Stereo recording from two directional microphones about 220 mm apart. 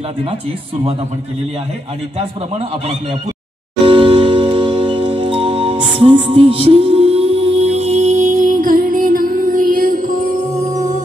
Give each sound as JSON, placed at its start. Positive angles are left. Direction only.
{"t": 3.8, "sound": "music", "side_deg": -25}